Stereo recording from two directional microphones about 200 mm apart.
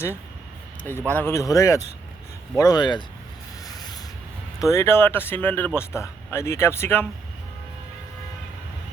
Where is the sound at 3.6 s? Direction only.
20° left (ahead or behind).